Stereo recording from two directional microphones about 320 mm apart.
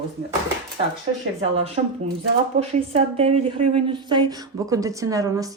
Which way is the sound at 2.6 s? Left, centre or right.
Centre.